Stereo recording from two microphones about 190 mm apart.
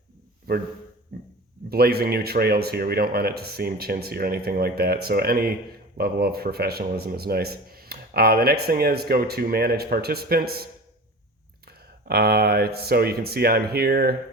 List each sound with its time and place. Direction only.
0.5 s a man's voice: 55° right (ahead or behind)